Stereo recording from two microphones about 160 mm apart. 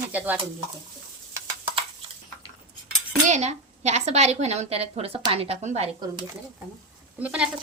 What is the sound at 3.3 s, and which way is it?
A woman's voice, 45° right (ahead or behind).